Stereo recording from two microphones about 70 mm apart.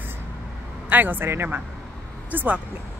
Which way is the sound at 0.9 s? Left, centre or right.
Right.